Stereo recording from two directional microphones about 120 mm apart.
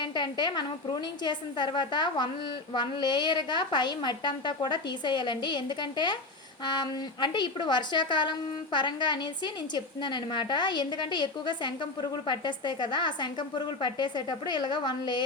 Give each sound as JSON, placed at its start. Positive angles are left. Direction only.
{"t": 0.0, "sound": "a woman's voice", "side_deg": 40}